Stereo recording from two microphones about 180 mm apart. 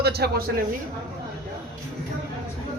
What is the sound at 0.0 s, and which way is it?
Speech, 65° right (ahead or behind).